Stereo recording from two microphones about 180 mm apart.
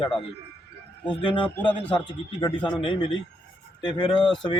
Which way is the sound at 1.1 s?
30° left (ahead or behind).